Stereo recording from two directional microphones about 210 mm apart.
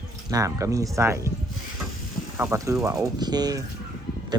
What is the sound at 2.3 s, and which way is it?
Speech, 10° right (ahead or behind).